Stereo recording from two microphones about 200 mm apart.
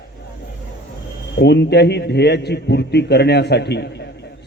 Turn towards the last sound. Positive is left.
turn(degrees=55)  # may be behind; listen again after turning